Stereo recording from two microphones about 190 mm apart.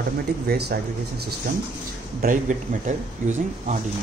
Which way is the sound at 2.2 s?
45° right (ahead or behind).